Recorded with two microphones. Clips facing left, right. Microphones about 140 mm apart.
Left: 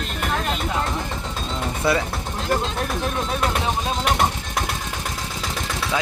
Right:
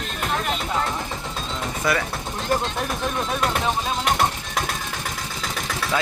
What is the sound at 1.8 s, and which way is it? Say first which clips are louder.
Speech: left 2 dB; 30° left (ahead or behind).